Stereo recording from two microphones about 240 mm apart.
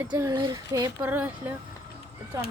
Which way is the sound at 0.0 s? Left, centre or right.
Centre.